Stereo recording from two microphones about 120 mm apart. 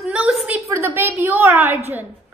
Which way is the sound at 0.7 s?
20° right (ahead or behind).